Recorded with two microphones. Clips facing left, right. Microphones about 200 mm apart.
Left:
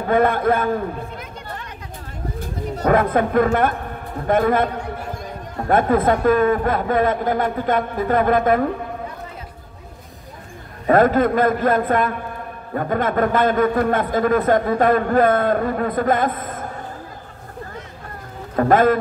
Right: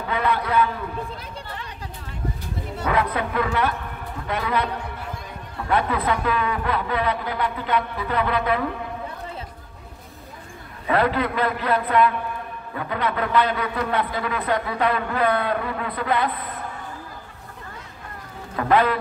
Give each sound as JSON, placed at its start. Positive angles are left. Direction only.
{"t": 0.0, "sound": "a man's voice", "side_deg": 50}
{"t": 2.7, "sound": "a man's voice", "side_deg": 45}
{"t": 10.9, "sound": "a man's voice", "side_deg": 45}
{"t": 18.6, "sound": "a man's voice", "side_deg": 45}